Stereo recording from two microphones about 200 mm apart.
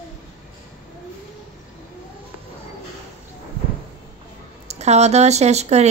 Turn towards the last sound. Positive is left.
turn(degrees=-35)  # may be behind; listen again after turning